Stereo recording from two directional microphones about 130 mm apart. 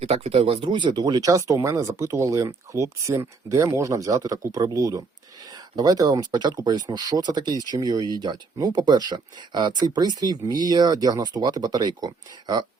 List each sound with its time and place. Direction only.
0.0 s speech: 50° right (ahead or behind); by 12.6 s 30° right (ahead or behind)